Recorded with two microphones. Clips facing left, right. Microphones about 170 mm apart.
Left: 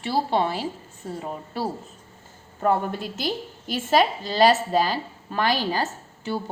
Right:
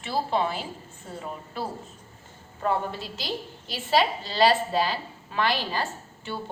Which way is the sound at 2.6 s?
50° left (ahead or behind).